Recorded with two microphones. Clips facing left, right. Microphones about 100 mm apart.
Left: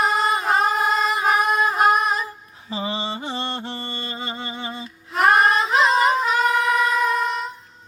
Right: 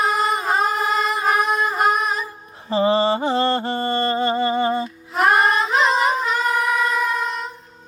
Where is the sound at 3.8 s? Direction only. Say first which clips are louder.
Right 12 dB; 90° right.